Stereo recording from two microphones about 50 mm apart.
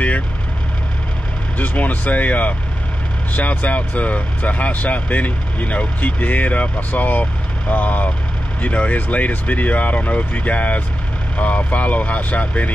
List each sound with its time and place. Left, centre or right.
1.6 s speech: left